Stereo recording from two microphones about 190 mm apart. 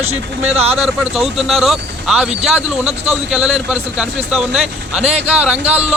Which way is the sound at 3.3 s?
5° right (ahead or behind).